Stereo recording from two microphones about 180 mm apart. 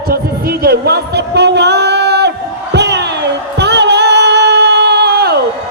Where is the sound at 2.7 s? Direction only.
70° right (ahead or behind).